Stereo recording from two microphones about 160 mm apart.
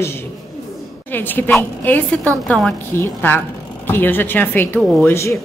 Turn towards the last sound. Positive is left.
turn(degrees=15)  # may be behind; listen again after turning